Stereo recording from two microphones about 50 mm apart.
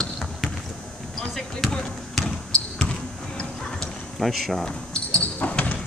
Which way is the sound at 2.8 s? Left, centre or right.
Centre.